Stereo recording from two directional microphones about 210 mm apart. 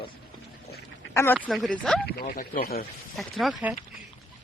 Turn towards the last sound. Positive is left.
turn(degrees=0)  # may be behind; listen again after turning